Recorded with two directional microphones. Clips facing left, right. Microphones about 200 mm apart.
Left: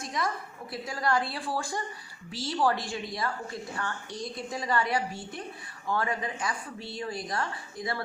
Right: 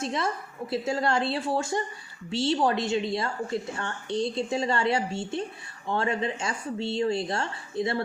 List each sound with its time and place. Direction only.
0.0 s a woman's voice: 25° right (ahead or behind)